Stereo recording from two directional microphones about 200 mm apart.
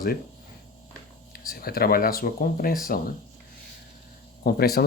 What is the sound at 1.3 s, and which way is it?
Speech, 50° left (ahead or behind).